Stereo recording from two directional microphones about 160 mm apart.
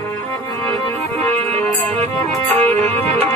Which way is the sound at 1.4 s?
10° left (ahead or behind).